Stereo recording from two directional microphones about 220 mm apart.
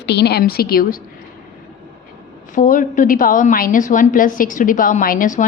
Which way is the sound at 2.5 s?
35° left (ahead or behind).